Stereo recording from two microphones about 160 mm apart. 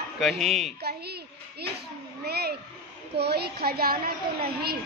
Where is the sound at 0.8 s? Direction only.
90° right.